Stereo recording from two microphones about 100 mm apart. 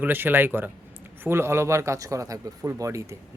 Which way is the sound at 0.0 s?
20° right (ahead or behind).